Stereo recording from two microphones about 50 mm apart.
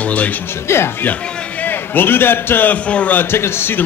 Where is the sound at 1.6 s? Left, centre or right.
Left.